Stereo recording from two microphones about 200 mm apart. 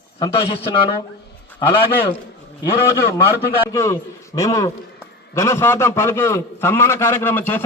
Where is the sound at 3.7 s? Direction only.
15° left (ahead or behind).